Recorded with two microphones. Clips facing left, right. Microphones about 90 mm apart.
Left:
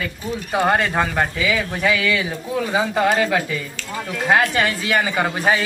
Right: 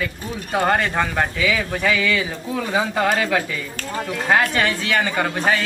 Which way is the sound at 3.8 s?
45° right (ahead or behind).